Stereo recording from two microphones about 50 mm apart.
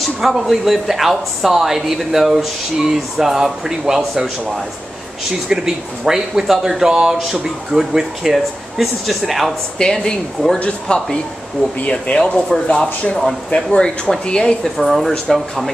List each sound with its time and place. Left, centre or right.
0.2 s a woman's voice: centre
9.8 s speech: centre
10.9 s speech: left
14.8 s a woman's voice: centre